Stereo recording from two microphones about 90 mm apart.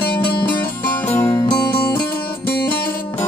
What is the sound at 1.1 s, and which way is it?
Music, 30° left (ahead or behind).